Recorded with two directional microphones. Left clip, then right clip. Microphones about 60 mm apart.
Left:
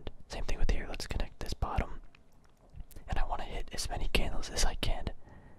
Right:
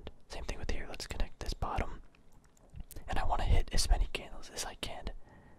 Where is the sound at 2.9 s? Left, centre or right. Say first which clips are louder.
Right 3 dB; centre.